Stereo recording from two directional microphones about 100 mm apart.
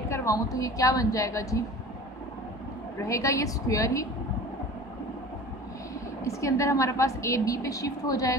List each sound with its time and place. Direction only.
0.1 s a woman's voice: 30° left (ahead or behind)
3.0 s a woman's voice: 30° left (ahead or behind)
6.2 s a woman's voice: 30° left (ahead or behind)